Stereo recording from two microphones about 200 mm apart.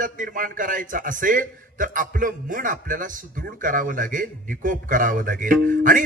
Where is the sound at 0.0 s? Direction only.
45° right (ahead or behind).